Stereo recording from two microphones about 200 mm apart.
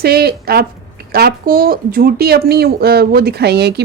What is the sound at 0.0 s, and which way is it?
Speech, 50° right (ahead or behind).